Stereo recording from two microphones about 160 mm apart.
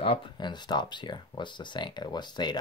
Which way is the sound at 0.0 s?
35° left (ahead or behind).